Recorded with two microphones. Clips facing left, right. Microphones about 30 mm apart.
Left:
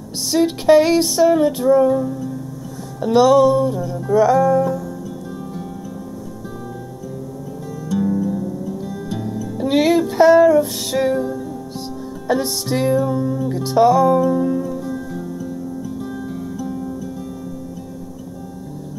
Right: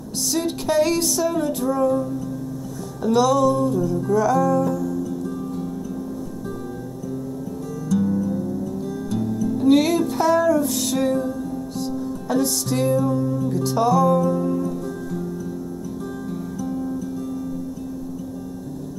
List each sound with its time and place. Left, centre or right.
0.3 s music: left
3.0 s music: left
4.4 s music: left
7.9 s music: centre
9.1 s music: left
9.4 s music: centre
9.7 s music: left; by 17.1 s centre